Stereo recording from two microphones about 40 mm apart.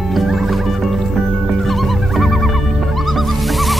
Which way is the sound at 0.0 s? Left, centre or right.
Centre.